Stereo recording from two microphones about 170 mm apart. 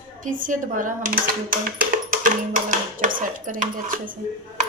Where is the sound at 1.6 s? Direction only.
55° right (ahead or behind).